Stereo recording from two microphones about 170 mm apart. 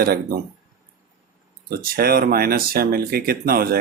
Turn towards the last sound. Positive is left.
turn(degrees=-60)  # may be behind; listen again after turning